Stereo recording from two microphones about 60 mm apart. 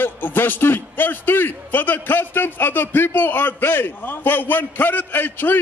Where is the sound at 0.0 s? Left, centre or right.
Left.